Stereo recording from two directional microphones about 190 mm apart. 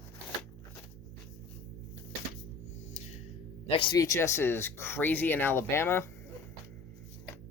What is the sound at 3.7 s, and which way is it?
Speech, 25° left (ahead or behind).